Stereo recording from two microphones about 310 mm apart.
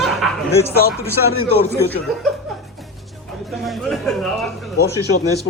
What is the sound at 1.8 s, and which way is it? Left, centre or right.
Speech, centre.